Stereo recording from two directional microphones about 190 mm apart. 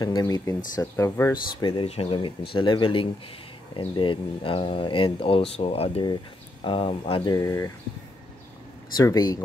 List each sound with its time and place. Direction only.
0.0 s speech: 20° left (ahead or behind)
8.9 s speech: 20° left (ahead or behind)